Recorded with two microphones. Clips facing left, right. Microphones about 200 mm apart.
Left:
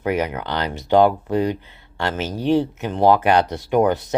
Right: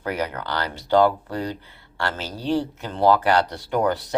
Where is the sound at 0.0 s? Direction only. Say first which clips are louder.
Left 5 dB; 20° left (ahead or behind).